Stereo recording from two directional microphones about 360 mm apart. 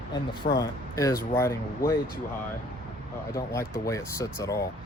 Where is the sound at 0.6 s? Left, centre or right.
Centre.